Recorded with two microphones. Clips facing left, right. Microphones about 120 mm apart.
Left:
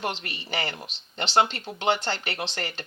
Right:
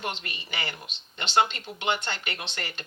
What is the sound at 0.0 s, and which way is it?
Speech, 35° left (ahead or behind).